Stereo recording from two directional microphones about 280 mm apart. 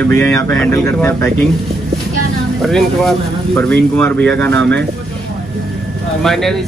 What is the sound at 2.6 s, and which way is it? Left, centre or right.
Speech, centre.